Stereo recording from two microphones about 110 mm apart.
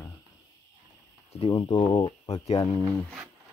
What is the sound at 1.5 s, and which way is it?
Speech, 45° left (ahead or behind).